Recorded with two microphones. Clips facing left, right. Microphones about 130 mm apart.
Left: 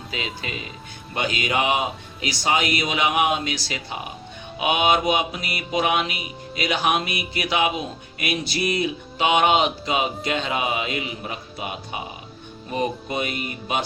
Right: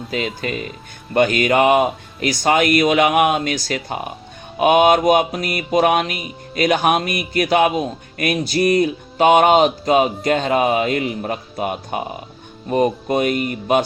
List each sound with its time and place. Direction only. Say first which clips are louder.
0.4 s mantra: right 8 dB; 50° right (ahead or behind)